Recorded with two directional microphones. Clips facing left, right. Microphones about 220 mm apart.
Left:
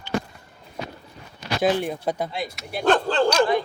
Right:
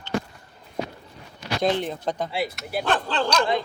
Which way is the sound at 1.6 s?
10° left (ahead or behind).